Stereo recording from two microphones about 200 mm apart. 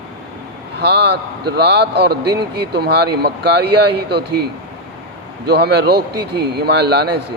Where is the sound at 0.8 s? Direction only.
55° right (ahead or behind).